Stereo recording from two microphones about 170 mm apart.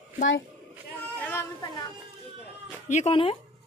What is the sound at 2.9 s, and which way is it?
Speech, 35° left (ahead or behind).